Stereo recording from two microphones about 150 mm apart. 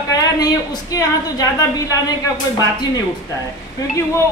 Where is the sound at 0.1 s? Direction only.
25° left (ahead or behind).